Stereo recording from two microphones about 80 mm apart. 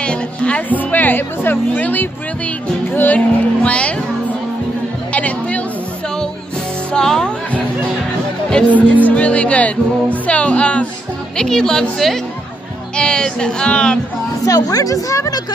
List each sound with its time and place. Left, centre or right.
0.0 s speech: centre
5.1 s music: centre
6.9 s music: centre
8.5 s speech: centre
14.4 s a woman's voice: left